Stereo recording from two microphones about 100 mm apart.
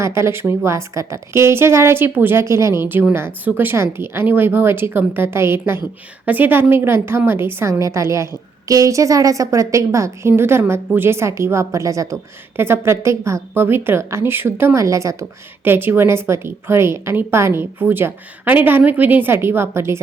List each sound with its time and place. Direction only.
0.0 s a woman's voice: 25° right (ahead or behind)